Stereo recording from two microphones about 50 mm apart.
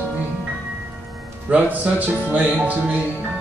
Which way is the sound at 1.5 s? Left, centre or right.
Right.